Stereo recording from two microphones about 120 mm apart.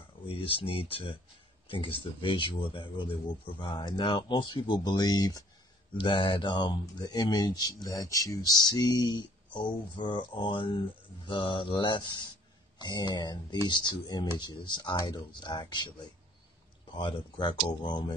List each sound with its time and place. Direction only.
0.3 s speech: 50° left (ahead or behind); by 5.4 s 30° left (ahead or behind)
5.9 s speech: 45° left (ahead or behind)
17.0 s speech: 40° left (ahead or behind)